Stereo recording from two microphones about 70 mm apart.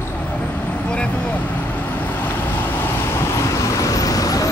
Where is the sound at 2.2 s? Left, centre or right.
Left.